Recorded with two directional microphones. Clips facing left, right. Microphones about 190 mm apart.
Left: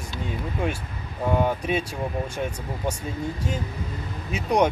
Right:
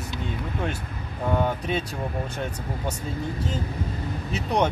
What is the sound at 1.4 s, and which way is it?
Speech, 10° left (ahead or behind).